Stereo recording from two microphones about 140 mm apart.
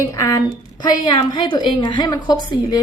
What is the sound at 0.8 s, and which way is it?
A woman's voice, 30° left (ahead or behind).